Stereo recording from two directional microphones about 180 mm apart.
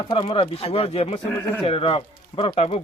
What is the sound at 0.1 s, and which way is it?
Speech, 30° left (ahead or behind).